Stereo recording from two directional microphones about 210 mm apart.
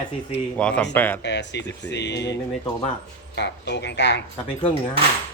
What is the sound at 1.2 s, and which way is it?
Speech, 55° left (ahead or behind).